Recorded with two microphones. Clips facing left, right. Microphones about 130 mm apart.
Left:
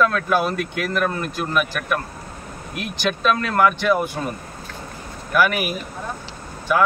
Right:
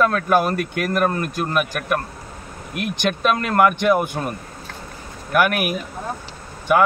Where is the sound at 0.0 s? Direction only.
45° right (ahead or behind).